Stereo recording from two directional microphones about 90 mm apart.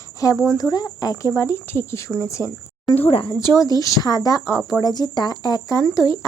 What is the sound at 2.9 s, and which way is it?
Speech, 90° left.